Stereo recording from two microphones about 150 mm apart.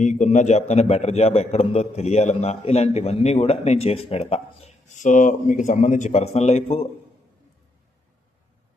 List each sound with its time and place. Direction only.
0.0 s a man's voice: 55° left (ahead or behind)
4.9 s a man's voice: 55° left (ahead or behind); by 6.8 s 40° left (ahead or behind)